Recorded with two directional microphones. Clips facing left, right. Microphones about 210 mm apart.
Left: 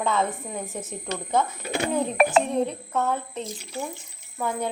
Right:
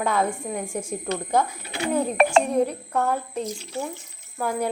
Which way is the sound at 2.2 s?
Centre (ahead or behind).